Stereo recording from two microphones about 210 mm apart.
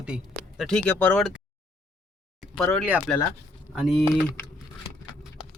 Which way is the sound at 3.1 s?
5° left (ahead or behind).